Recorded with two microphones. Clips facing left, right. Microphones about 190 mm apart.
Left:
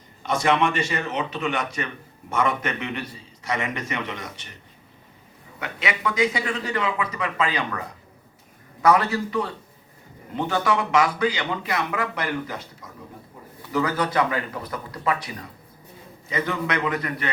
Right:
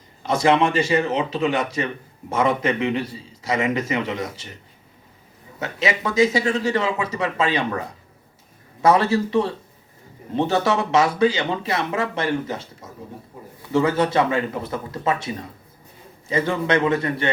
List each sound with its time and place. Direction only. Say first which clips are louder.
0.2 s speech: right 4 dB; 30° right (ahead or behind)
5.5 s speech: right 5 dB; 25° right (ahead or behind)